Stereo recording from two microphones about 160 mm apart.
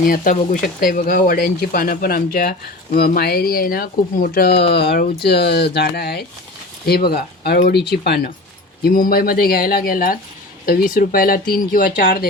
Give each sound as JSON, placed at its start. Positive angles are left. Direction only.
{"t": 0.0, "sound": "speech", "side_deg": 60}
{"t": 6.8, "sound": "speech", "side_deg": 75}
{"t": 7.7, "sound": "speech", "side_deg": 90}
{"t": 8.8, "sound": "speech", "side_deg": 65}